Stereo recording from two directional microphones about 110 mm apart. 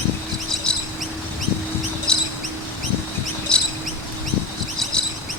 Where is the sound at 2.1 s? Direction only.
5° left (ahead or behind).